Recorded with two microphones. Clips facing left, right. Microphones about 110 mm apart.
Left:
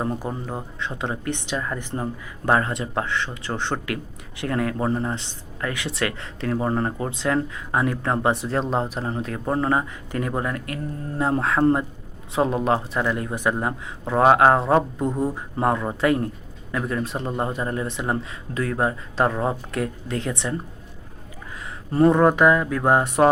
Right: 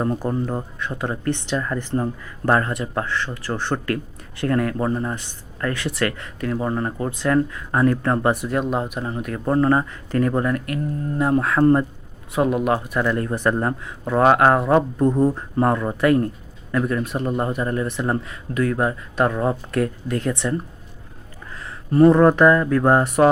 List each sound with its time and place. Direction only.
0.3 s speech: 15° left (ahead or behind); by 7.1 s 30° left (ahead or behind)
7.1 s speech: 20° left (ahead or behind)
13.1 s speech: 15° left (ahead or behind)
14.8 s speech: 10° left (ahead or behind)
21.9 s speech: 20° left (ahead or behind)